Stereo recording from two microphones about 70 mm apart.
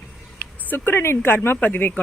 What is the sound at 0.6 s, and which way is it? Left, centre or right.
Speech, left.